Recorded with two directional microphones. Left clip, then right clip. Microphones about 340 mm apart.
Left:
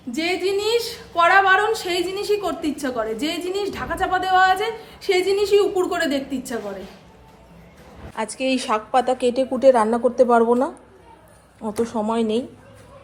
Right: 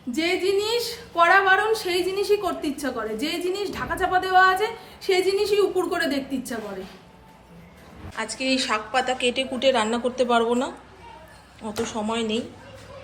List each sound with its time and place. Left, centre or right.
0.1 s a woman's voice: centre
8.1 s a woman's voice: centre
9.6 s a woman's voice: left
11.7 s a woman's voice: centre